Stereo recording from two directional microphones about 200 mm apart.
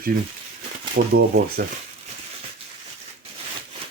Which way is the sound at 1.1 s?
45° right (ahead or behind).